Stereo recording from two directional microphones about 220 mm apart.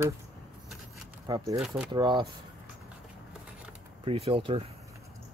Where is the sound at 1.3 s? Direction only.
15° right (ahead or behind).